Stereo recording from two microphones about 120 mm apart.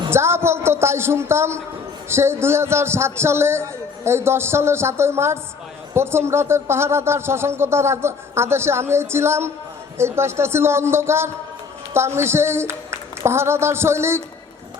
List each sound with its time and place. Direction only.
0.1 s a man's voice: 20° right (ahead or behind)